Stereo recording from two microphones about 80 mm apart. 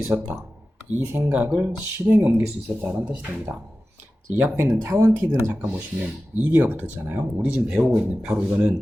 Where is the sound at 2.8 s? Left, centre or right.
Centre.